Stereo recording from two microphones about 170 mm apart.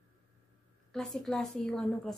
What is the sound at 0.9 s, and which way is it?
Speech, centre (ahead or behind).